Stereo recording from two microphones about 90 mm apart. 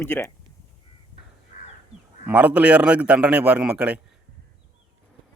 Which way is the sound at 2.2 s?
15° right (ahead or behind).